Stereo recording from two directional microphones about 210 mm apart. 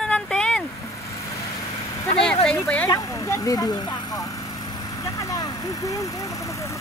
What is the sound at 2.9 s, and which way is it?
Speech, 15° left (ahead or behind).